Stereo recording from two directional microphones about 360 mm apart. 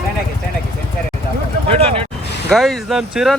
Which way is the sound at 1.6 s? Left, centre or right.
Centre.